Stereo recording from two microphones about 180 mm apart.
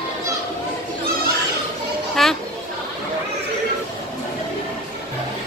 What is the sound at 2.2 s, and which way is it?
Children playing, centre (ahead or behind).